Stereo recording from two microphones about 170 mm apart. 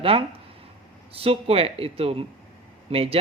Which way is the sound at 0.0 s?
30° right (ahead or behind).